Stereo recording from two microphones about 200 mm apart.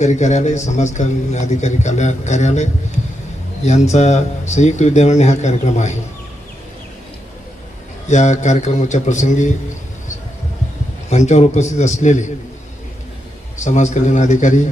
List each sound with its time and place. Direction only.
0.0 s a man's voice: 35° left (ahead or behind)
3.7 s a man's voice: 35° left (ahead or behind)
8.0 s a man's voice: 35° left (ahead or behind)
11.1 s a man's voice: 35° left (ahead or behind)
13.7 s a man's voice: 35° left (ahead or behind)